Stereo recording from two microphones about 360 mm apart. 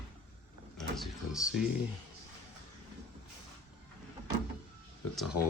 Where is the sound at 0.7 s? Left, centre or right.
Centre.